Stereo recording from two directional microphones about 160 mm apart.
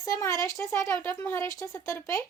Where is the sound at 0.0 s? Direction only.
20° left (ahead or behind).